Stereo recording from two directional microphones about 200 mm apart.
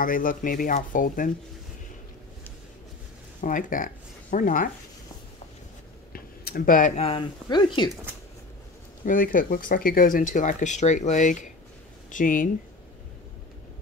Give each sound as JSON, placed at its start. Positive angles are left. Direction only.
{"t": 0.0, "sound": "speech", "side_deg": 45}
{"t": 3.3, "sound": "speech", "side_deg": 40}
{"t": 6.1, "sound": "speech", "side_deg": 50}
{"t": 9.0, "sound": "speech", "side_deg": 45}